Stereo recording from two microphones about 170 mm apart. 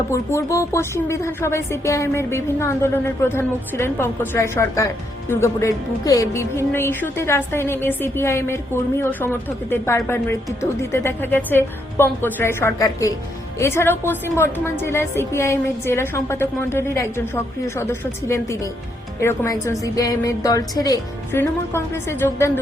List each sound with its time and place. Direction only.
0.1 s speech: 15° left (ahead or behind)
19.2 s a woman's voice: 15° left (ahead or behind)